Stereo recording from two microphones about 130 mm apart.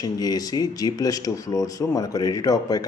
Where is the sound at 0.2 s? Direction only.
30° left (ahead or behind).